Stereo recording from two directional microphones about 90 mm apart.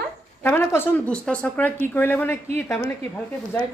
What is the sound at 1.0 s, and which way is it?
A woman's voice, 10° left (ahead or behind).